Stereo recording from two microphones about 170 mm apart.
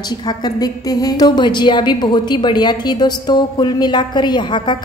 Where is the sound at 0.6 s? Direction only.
20° left (ahead or behind).